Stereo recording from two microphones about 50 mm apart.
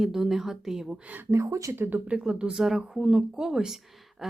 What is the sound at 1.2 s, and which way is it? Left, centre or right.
Speech, right.